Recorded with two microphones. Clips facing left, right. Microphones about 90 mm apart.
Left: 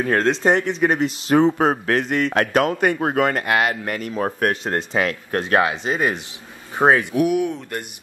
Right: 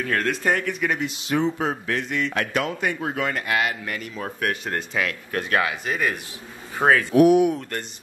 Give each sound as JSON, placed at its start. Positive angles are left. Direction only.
{"t": 0.0, "sound": "speech", "side_deg": 30}